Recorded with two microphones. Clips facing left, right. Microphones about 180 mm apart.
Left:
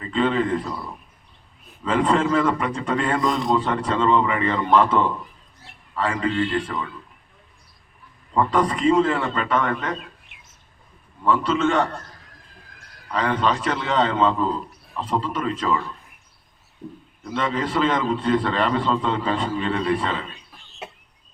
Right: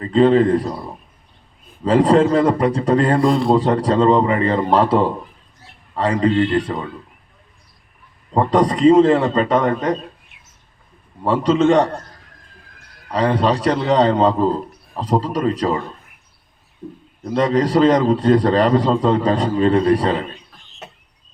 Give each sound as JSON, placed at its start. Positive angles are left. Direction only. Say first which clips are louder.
{"t": 0.0, "sound": "a man's voice", "louder": "right 8 dB", "side_deg": -35}
{"t": 8.3, "sound": "a man's voice", "louder": "right 5 dB", "side_deg": -35}
{"t": 11.2, "sound": "a man's voice", "louder": "right 5 dB", "side_deg": -35}
{"t": 13.1, "sound": "a man's voice", "louder": "right 5 dB", "side_deg": -35}
{"t": 17.2, "sound": "a man's voice", "louder": "right 8 dB", "side_deg": -40}